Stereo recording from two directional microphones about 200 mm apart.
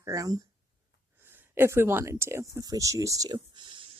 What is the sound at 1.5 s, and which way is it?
Speech, 10° right (ahead or behind).